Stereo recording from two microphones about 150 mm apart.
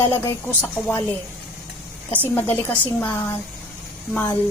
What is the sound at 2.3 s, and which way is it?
Speech, 10° left (ahead or behind).